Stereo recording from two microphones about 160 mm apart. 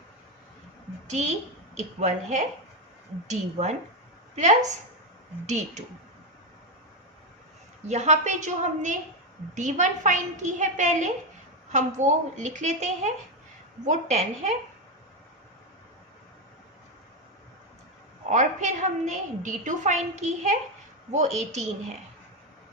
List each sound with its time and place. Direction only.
1.0 s a woman's voice: 45° right (ahead or behind)
7.9 s a woman's voice: 45° right (ahead or behind)
18.3 s a woman's voice: 50° right (ahead or behind)